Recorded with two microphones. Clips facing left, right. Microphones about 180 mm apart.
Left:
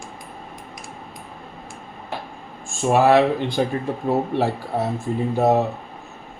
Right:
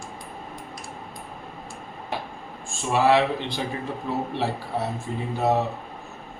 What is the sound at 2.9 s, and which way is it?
A man's voice, 50° left (ahead or behind).